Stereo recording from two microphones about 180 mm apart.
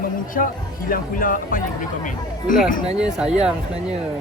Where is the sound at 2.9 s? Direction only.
5° right (ahead or behind).